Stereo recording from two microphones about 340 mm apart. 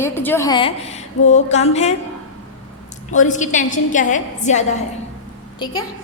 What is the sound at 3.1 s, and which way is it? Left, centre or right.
A woman's voice, left.